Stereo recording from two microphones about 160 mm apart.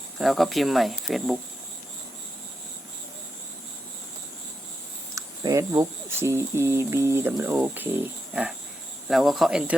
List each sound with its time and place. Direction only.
0.2 s speech: centre (ahead or behind)
5.1 s speech: 20° right (ahead or behind); by 9.7 s 5° right (ahead or behind)